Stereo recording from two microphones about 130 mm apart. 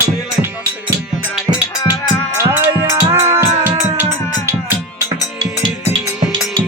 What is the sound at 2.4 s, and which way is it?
Music, 20° right (ahead or behind).